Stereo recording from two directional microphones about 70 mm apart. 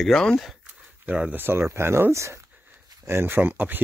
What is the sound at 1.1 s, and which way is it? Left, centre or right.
Speech, centre.